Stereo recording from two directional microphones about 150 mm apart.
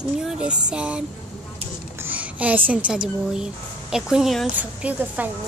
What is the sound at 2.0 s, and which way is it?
Speech, 10° right (ahead or behind).